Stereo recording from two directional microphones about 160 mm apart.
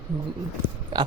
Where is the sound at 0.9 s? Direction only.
25° right (ahead or behind).